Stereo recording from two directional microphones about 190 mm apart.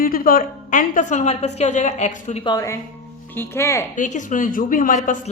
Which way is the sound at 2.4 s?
20° left (ahead or behind).